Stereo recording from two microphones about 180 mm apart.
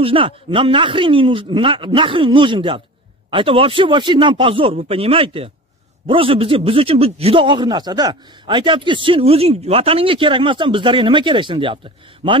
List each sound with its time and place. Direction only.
0.0 s a man's voice: 30° right (ahead or behind)